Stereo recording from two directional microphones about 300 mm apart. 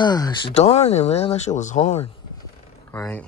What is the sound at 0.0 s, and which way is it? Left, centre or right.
Speech, centre.